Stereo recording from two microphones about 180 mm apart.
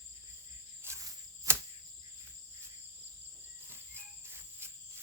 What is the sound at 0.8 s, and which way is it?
Cricket, 15° right (ahead or behind).